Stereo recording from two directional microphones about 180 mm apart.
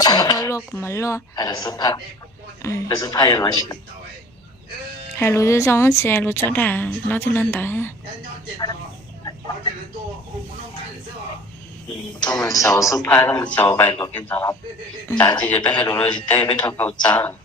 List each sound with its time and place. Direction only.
0.0 s speech: 20° left (ahead or behind)
5.1 s a woman's voice: 15° left (ahead or behind)
12.2 s a woman's voice: 20° left (ahead or behind)
17.0 s speech: 25° left (ahead or behind)